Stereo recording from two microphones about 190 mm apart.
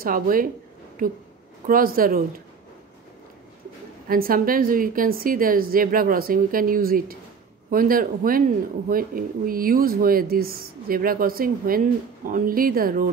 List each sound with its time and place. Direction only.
0.0 s speech: 50° right (ahead or behind)
1.7 s speech: 50° right (ahead or behind)
4.1 s speech: 50° right (ahead or behind)